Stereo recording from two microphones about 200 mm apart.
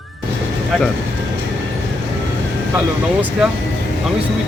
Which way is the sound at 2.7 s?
5° right (ahead or behind).